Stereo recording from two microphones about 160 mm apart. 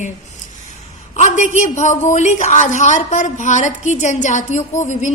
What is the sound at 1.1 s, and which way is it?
A man's voice, 45° left (ahead or behind).